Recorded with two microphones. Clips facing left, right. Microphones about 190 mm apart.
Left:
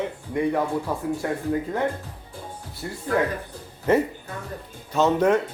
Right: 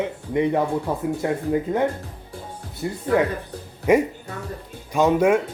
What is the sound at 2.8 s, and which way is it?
Speech, 15° right (ahead or behind).